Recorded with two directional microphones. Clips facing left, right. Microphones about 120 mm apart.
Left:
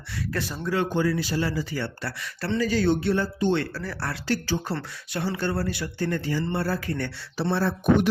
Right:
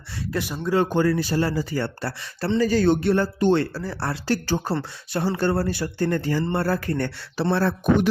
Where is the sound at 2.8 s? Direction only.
60° right (ahead or behind).